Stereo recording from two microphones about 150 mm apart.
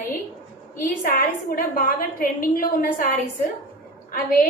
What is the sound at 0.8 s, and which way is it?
A woman's voice, 70° left (ahead or behind).